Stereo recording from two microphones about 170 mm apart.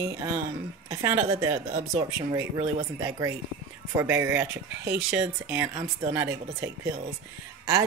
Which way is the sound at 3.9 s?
15° right (ahead or behind).